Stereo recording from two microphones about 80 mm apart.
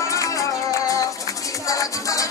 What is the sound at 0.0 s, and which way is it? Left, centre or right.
Music, left.